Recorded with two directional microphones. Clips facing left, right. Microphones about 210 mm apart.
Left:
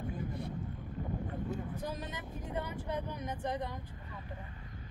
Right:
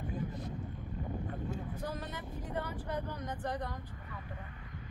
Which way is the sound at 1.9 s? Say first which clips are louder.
Even; 15° left (ahead or behind).